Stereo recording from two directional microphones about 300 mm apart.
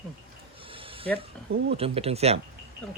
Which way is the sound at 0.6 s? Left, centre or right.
Centre.